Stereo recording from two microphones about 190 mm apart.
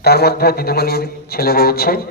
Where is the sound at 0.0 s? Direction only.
55° left (ahead or behind).